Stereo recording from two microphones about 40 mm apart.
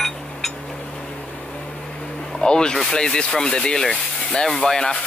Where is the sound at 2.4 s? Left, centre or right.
Left.